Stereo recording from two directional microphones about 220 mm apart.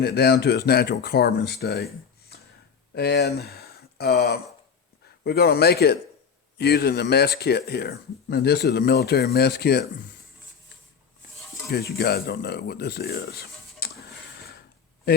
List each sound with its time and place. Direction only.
0.0 s speech: 45° left (ahead or behind)
2.9 s speech: 45° left (ahead or behind)
11.7 s speech: 45° left (ahead or behind)